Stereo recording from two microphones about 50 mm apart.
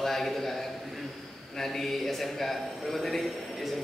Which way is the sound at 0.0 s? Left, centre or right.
Centre.